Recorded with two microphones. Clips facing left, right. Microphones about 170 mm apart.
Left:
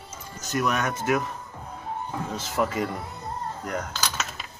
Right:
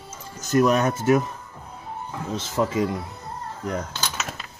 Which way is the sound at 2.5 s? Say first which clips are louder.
Right 3 dB; 20° right (ahead or behind).